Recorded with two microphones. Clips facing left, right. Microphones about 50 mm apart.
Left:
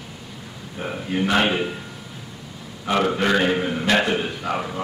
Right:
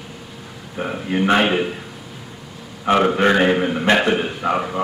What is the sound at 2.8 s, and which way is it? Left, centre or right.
A man's voice, right.